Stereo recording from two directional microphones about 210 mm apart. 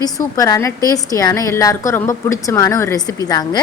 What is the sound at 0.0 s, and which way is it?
A woman's voice, 15° left (ahead or behind).